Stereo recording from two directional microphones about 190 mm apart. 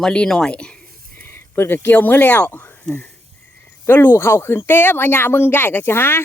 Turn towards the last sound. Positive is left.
turn(degrees=10)  # may be behind; listen again after turning